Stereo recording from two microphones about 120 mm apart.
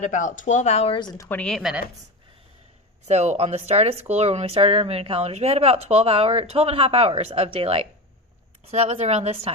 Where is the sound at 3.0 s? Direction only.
70° right (ahead or behind); by 7.8 s 50° right (ahead or behind).